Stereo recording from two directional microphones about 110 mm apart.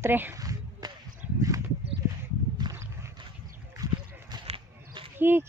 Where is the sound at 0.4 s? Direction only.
35° right (ahead or behind).